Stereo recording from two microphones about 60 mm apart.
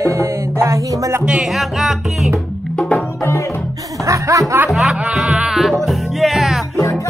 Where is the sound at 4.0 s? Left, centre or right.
Right.